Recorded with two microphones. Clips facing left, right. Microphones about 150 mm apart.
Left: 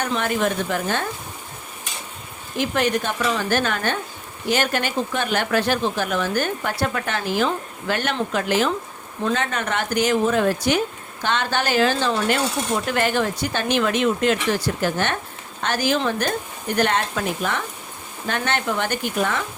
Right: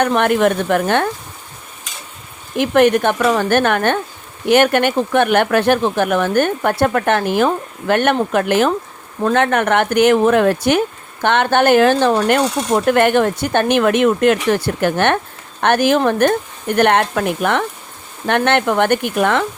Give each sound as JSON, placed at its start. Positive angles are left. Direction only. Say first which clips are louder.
{"t": 0.0, "sound": "speech", "louder": "right 8 dB", "side_deg": -60}
{"t": 2.6, "sound": "speech", "louder": "right 9 dB", "side_deg": -60}